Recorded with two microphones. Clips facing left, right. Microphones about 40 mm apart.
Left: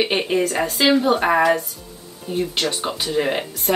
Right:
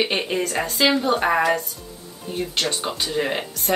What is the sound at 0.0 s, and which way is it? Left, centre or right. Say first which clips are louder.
Speech: left 3 dB; centre.